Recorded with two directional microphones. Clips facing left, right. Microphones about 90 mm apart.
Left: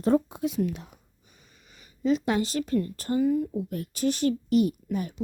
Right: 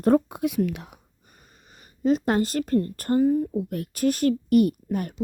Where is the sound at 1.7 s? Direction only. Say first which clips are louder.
Right 3 dB; 40° right (ahead or behind).